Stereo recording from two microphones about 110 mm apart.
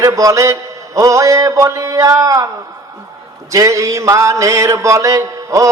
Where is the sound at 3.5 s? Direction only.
30° right (ahead or behind).